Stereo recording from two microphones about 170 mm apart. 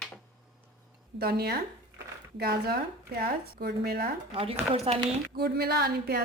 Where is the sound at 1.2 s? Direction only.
70° right (ahead or behind).